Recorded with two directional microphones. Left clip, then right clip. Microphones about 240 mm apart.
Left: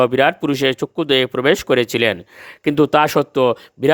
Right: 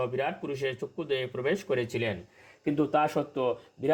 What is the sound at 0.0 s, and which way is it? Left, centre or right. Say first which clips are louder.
Speech: left 16 dB; left.